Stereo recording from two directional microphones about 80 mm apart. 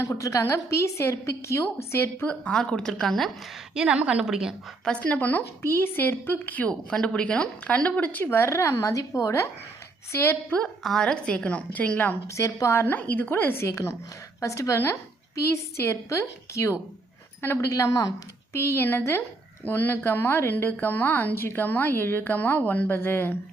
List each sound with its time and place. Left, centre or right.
0.0 s a woman's voice: left
2.2 s a woman's voice: centre
3.8 s a woman's voice: centre
4.9 s a woman's voice: centre
6.7 s a woman's voice: centre; by 9.5 s left
10.1 s a woman's voice: left
10.8 s a woman's voice: centre
12.3 s a woman's voice: left
18.5 s a woman's voice: left